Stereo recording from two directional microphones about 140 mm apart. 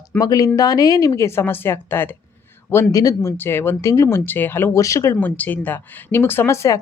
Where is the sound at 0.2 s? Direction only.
25° left (ahead or behind).